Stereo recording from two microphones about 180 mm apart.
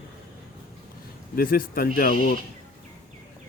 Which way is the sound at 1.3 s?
55° left (ahead or behind).